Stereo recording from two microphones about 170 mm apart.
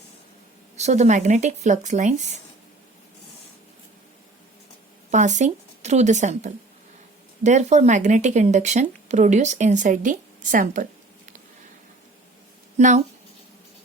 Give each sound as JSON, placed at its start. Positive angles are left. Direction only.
{"t": 0.8, "sound": "speech", "side_deg": -40}
{"t": 5.1, "sound": "speech", "side_deg": -45}
{"t": 12.7, "sound": "a woman's voice", "side_deg": -45}